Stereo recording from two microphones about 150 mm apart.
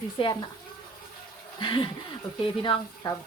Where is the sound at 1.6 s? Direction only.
30° left (ahead or behind).